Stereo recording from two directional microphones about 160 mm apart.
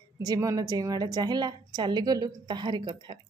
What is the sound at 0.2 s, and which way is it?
A woman's voice, 20° right (ahead or behind).